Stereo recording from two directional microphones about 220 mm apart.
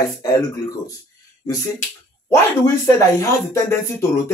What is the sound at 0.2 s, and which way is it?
Speech, 15° left (ahead or behind).